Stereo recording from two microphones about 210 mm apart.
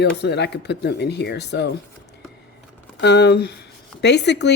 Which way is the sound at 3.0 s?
55° left (ahead or behind).